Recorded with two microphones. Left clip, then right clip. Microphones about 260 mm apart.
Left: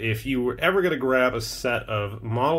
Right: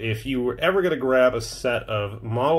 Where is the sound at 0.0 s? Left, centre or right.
Centre.